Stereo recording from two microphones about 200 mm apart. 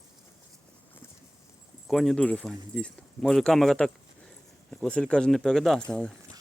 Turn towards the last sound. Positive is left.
turn(degrees=5)  # may be behind; listen again after turning